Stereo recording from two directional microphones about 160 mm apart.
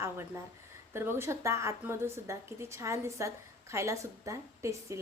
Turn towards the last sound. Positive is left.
turn(degrees=-20)  # may be behind; listen again after turning